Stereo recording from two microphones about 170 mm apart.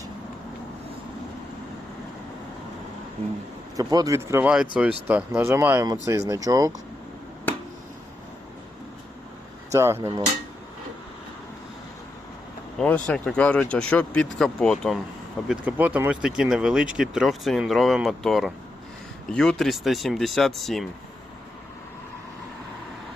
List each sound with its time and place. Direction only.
3.8 s speech: 20° right (ahead or behind)
9.7 s speech: 15° right (ahead or behind)
12.8 s speech: 10° left (ahead or behind)
15.4 s speech: 10° right (ahead or behind)